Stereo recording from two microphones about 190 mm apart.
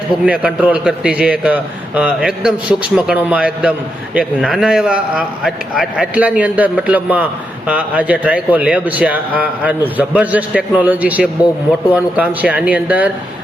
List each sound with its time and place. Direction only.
0.3 s a man's voice: 5° right (ahead or behind)